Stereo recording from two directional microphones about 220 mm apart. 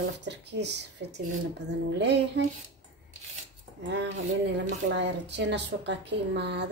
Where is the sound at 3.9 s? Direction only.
55° right (ahead or behind).